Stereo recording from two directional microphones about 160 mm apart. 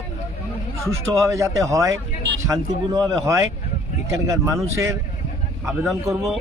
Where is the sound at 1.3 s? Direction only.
20° right (ahead or behind).